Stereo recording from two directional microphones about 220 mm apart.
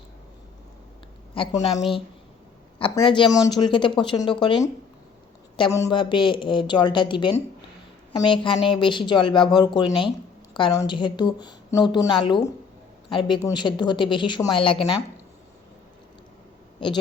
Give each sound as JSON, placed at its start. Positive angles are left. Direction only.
{"t": 1.3, "sound": "speech", "side_deg": 25}